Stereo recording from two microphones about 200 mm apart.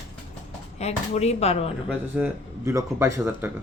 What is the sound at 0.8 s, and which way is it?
Speech, 30° left (ahead or behind).